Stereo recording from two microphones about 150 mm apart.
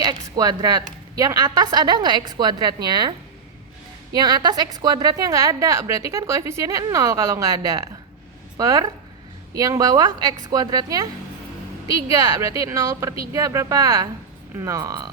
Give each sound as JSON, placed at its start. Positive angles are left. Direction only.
{"t": 0.0, "sound": "a woman's voice", "side_deg": -25}